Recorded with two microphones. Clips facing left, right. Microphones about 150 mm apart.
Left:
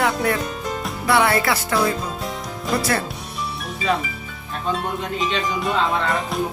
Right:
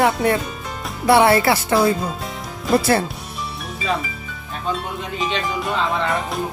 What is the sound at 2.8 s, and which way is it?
Speech, 25° right (ahead or behind).